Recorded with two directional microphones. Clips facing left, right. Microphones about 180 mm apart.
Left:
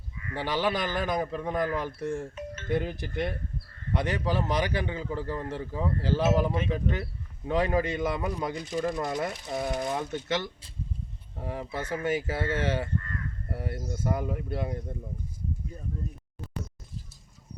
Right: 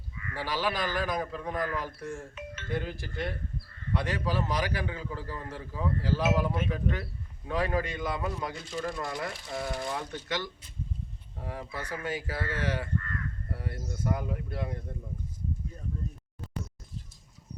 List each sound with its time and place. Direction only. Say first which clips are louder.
0.3 s a man's voice: left 3 dB; 20° left (ahead or behind)
2.3 s music: left 4 dB; 40° left (ahead or behind)
2.6 s a man's voice: left 5 dB; 20° left (ahead or behind)